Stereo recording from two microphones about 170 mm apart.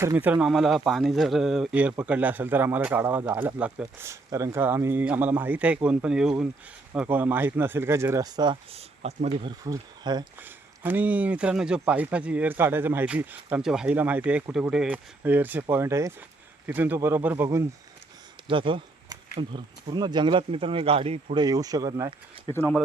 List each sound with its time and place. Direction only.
0.0 s speech: 15° right (ahead or behind)
8.7 s speech: 40° right (ahead or behind)
9.5 s speech: 25° right (ahead or behind)
10.4 s speech: 10° right (ahead or behind)
18.4 s speech: 30° right (ahead or behind)
21.4 s speech: 20° right (ahead or behind)
22.5 s speech: 5° left (ahead or behind)